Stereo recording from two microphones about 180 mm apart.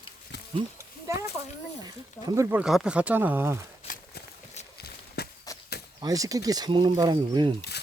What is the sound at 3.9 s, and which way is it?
Walk, 50° left (ahead or behind).